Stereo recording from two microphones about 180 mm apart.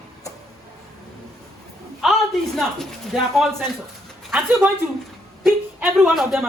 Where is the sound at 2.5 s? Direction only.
Centre (ahead or behind).